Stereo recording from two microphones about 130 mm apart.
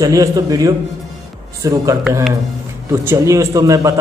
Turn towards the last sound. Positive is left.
turn(degrees=-25)  # may be behind; listen again after turning